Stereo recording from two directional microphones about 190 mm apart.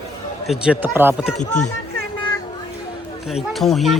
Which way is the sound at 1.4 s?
40° left (ahead or behind).